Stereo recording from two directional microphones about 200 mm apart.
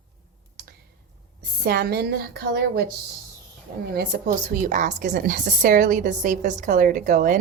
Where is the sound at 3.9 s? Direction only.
45° right (ahead or behind).